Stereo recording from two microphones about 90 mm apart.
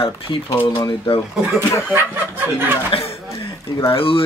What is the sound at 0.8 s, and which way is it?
Speech, 60° left (ahead or behind).